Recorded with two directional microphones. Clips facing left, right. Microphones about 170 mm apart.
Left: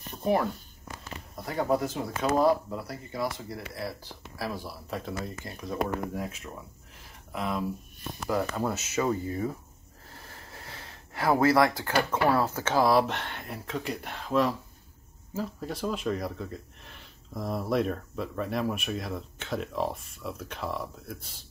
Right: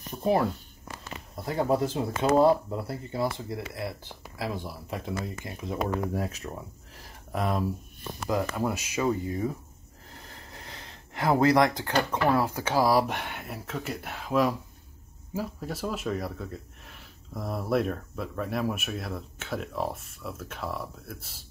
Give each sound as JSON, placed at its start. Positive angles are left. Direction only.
{"t": 0.2, "sound": "speech", "side_deg": -25}
{"t": 6.1, "sound": "speech", "side_deg": -40}
{"t": 8.3, "sound": "speech", "side_deg": -15}
{"t": 10.2, "sound": "a sound", "side_deg": -20}
{"t": 12.3, "sound": "speech", "side_deg": -15}